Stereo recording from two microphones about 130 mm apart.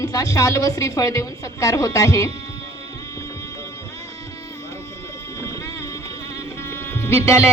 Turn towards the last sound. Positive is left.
turn(degrees=20)  # may be behind; listen again after turning